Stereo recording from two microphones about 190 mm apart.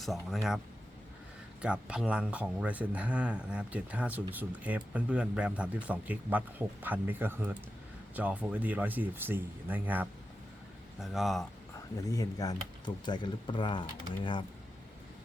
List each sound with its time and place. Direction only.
0.0 s speech: centre (ahead or behind)
1.6 s speech: 5° right (ahead or behind)
11.9 s speech: 20° left (ahead or behind)